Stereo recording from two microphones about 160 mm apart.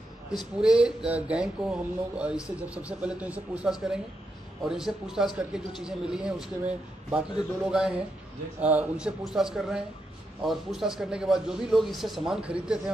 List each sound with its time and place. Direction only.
0.6 s a man's voice: 5° right (ahead or behind)